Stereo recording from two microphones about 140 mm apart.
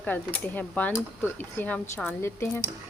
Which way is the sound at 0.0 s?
15° left (ahead or behind).